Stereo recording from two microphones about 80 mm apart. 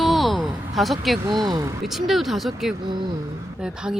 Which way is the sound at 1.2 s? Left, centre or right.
Right.